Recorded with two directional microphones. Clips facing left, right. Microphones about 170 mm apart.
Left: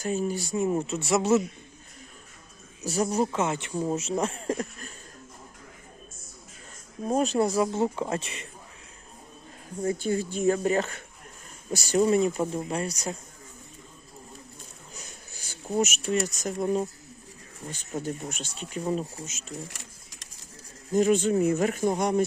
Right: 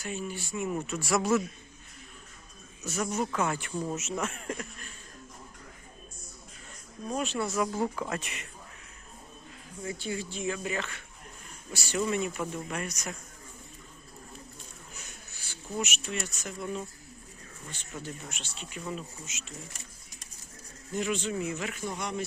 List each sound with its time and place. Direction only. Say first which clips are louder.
0.0 s speech: left 8 dB; 40° left (ahead or behind); by 1.5 s 25° left (ahead or behind)
2.8 s speech: left 6 dB; 35° left (ahead or behind)
3.4 s speech: left 3 dB; 25° left (ahead or behind)
7.0 s speech: left 8 dB; 40° left (ahead or behind)
9.8 s speech: left 8 dB; 45° left (ahead or behind)
14.9 s speech: left 3 dB; 40° left (ahead or behind)
19.7 s sewing machine: left 3 dB; 90° left
20.9 s speech: left 9 dB; 45° left (ahead or behind)